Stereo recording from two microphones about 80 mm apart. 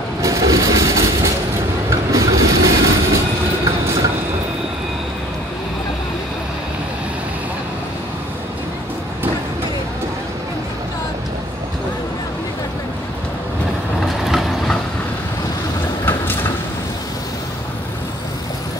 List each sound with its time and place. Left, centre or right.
0.2 s vehicle: right
1.9 s train: right
14.0 s vehicle: centre